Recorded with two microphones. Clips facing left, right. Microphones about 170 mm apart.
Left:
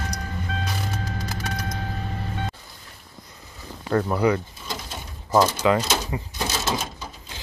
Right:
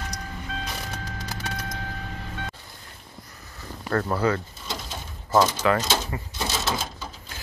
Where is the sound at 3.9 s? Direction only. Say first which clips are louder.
Left 3 dB; 15° left (ahead or behind).